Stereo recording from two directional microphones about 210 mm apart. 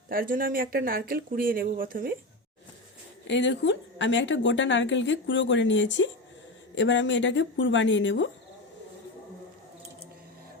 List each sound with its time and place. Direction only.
0.1 s speech: 40° right (ahead or behind)
3.2 s a woman's voice: 60° left (ahead or behind)